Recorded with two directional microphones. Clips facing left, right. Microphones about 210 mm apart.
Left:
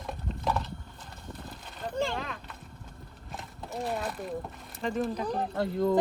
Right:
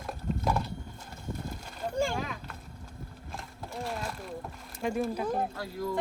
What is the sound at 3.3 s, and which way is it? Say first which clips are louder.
Horse: left 3 dB; centre (ahead or behind).